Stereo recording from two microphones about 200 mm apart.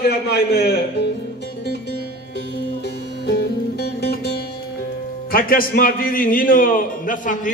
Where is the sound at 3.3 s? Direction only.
55° left (ahead or behind).